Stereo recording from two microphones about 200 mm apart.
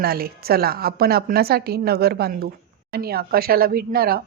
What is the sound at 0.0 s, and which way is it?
Speech, 50° right (ahead or behind).